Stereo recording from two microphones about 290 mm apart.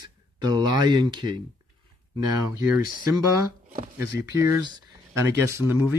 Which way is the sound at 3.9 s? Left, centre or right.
Centre.